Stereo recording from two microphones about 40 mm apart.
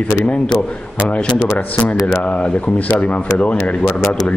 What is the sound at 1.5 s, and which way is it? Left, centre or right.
Speech, left.